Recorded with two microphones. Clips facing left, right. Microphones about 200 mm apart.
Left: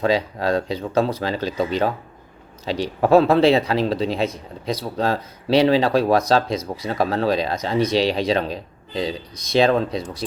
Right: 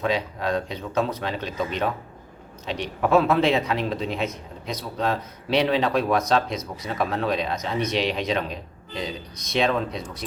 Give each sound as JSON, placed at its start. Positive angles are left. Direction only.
{"t": 0.0, "sound": "speech", "side_deg": 35}